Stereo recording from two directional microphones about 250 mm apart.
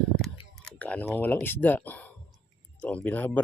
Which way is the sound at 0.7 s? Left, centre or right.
Centre.